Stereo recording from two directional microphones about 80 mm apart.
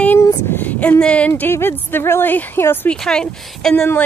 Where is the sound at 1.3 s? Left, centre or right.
Left.